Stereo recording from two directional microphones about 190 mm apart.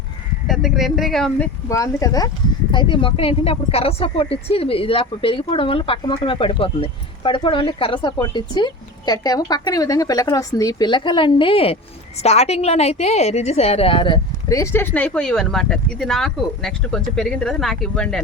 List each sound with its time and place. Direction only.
0.4 s speech: centre (ahead or behind)
1.7 s a woman's voice: 15° left (ahead or behind)